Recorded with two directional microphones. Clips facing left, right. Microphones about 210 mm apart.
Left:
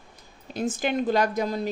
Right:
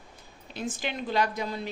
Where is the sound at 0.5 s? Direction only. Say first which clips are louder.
Left 7 dB; 45° left (ahead or behind).